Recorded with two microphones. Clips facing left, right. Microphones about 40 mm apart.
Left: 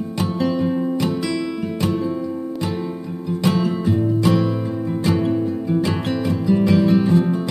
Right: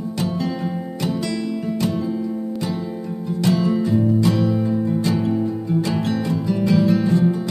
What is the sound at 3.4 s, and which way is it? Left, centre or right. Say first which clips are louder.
Music: right 1 dB; left.